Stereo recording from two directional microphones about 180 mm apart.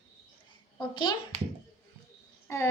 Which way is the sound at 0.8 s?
25° left (ahead or behind).